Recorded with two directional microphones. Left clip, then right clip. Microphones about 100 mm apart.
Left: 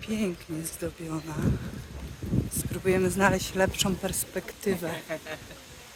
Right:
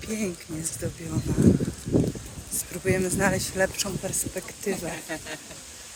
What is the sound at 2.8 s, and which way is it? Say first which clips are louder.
Speech: left 1 dB; 35° left (ahead or behind).